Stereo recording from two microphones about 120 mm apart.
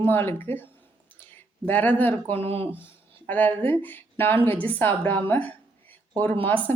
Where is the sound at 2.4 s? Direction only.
55° right (ahead or behind).